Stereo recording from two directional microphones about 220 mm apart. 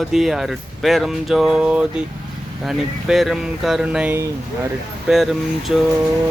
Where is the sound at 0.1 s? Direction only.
Centre (ahead or behind).